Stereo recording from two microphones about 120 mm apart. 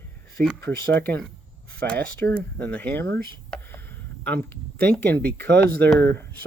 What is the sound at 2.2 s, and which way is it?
Speech, 15° left (ahead or behind).